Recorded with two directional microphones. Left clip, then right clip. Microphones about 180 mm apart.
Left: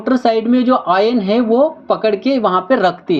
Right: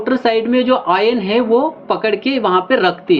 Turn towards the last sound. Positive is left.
turn(degrees=45)  # may be behind; listen again after turning